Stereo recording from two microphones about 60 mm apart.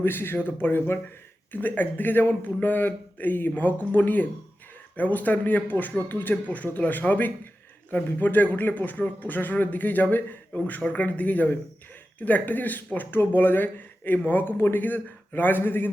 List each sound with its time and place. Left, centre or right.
0.0 s a man's voice: left